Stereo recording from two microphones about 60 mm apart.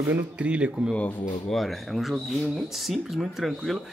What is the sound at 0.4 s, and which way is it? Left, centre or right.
Speech, centre.